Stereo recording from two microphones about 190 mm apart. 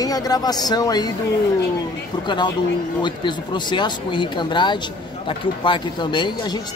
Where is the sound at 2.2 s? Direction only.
25° left (ahead or behind).